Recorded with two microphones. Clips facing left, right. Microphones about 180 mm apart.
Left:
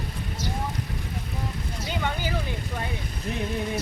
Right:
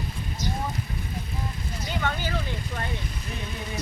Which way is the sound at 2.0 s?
15° left (ahead or behind).